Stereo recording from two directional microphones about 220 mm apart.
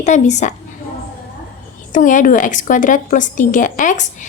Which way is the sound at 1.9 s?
35° left (ahead or behind).